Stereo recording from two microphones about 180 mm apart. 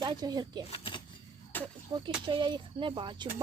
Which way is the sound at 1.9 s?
30° right (ahead or behind).